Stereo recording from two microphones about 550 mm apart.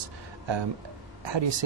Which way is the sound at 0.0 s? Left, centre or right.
Right.